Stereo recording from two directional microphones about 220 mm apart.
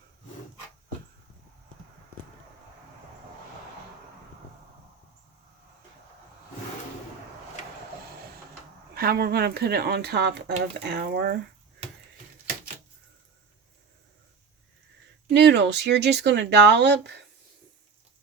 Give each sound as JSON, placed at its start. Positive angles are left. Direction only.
{"t": 9.0, "sound": "speech", "side_deg": -45}
{"t": 15.3, "sound": "speech", "side_deg": -50}